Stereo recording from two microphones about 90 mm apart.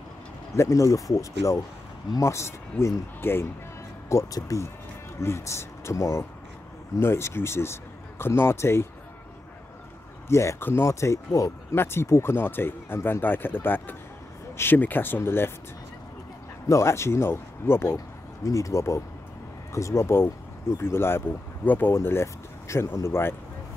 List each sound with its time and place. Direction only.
0.6 s speech: 35° left (ahead or behind)
4.1 s speech: 40° left (ahead or behind)
10.2 s speech: 30° left (ahead or behind)
16.6 s speech: 35° left (ahead or behind)